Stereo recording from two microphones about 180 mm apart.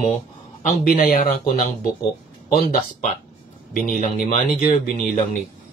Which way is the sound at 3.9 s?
45° left (ahead or behind).